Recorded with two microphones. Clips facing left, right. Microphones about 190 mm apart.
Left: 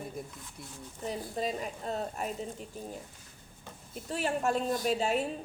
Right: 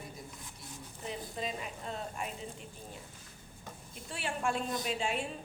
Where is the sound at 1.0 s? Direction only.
40° left (ahead or behind).